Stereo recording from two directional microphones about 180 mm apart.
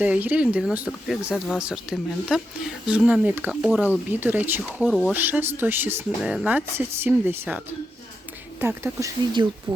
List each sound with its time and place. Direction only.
0.0 s speech: 10° right (ahead or behind)
4.8 s speech: 5° left (ahead or behind)
5.1 s speech: 10° right (ahead or behind)
8.6 s speech: 15° right (ahead or behind)